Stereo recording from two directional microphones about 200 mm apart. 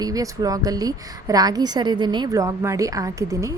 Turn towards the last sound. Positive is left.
turn(degrees=-15)  # may be behind; listen again after turning